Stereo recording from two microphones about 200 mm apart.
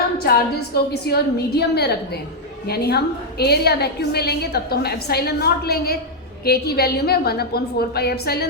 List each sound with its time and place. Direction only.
0.2 s a woman's voice: 50° left (ahead or behind)